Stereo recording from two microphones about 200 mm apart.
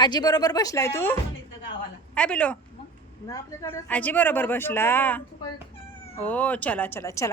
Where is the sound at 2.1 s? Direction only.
5° left (ahead or behind).